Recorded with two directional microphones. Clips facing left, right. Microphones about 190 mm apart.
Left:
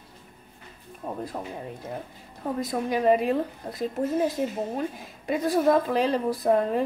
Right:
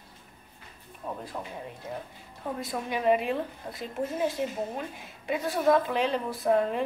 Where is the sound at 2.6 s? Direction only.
40° left (ahead or behind).